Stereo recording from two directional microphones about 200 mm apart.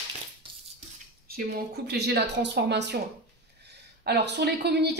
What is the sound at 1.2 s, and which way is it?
A woman's voice, 50° right (ahead or behind).